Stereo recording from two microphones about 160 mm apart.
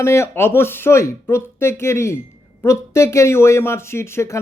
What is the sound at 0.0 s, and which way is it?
Speech, 15° left (ahead or behind).